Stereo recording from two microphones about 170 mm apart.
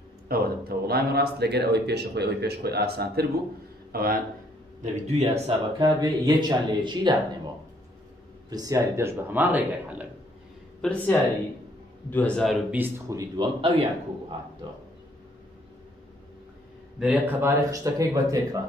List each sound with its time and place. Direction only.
0.3 s a man's voice: 65° right (ahead or behind)
5.0 s speech: 40° right (ahead or behind)
5.9 s speech: 25° right (ahead or behind)
8.5 s speech: 20° right (ahead or behind)
10.8 s a man's voice: 5° left (ahead or behind)
12.7 s speech: 15° right (ahead or behind); by 13.8 s 35° right (ahead or behind)
17.0 s speech: 10° right (ahead or behind)